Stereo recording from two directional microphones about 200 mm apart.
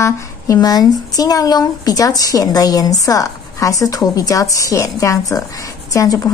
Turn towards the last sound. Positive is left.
turn(degrees=15)  # may be behind; listen again after turning